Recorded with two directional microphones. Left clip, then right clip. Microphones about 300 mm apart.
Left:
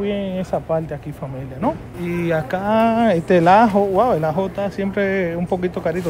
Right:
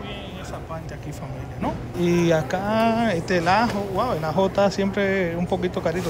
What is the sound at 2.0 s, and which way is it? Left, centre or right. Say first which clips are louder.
Speech: even; centre.